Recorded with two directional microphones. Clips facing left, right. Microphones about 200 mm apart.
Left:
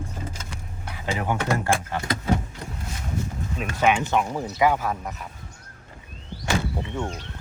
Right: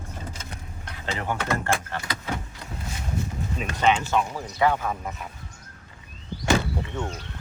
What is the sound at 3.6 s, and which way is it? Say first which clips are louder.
Speech: left 1 dB; 10° left (ahead or behind).